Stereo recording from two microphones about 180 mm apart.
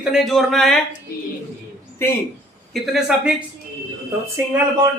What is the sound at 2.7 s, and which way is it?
Speech, centre (ahead or behind).